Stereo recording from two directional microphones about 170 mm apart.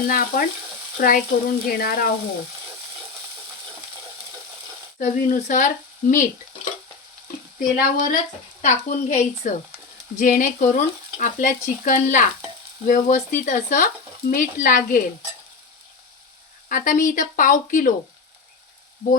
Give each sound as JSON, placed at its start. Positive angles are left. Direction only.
{"t": 0.1, "sound": "speech", "side_deg": 60}
{"t": 4.9, "sound": "frying", "side_deg": 50}
{"t": 7.8, "sound": "frying", "side_deg": 55}
{"t": 16.6, "sound": "frying", "side_deg": 50}